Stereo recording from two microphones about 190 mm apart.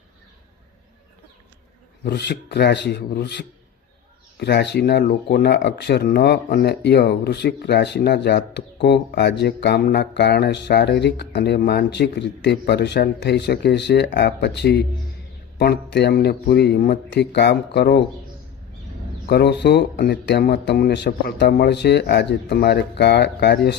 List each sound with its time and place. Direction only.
2.0 s speech: 60° left (ahead or behind)
19.3 s speech: 60° left (ahead or behind)